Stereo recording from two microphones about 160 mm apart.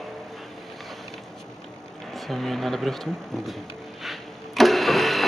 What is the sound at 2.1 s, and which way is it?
Speech, centre (ahead or behind).